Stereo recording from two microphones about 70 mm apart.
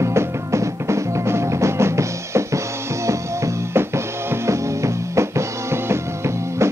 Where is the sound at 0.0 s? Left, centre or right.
Right.